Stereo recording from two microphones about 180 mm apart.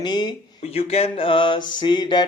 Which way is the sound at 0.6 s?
35° left (ahead or behind).